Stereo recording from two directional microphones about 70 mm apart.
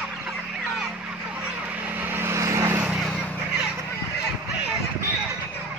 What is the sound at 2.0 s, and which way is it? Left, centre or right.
Vehicle, right.